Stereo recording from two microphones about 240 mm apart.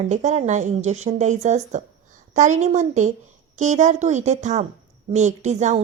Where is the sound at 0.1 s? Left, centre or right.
Right.